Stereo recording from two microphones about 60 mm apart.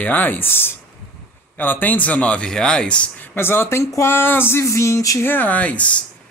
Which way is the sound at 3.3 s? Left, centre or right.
Left.